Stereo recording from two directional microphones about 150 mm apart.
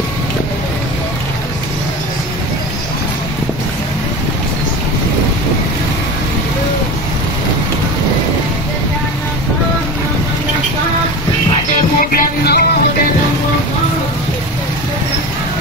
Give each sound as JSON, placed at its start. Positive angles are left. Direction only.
{"t": 12.0, "sound": "music", "side_deg": 80}